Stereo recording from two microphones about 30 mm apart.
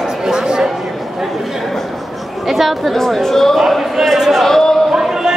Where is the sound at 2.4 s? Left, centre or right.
Centre.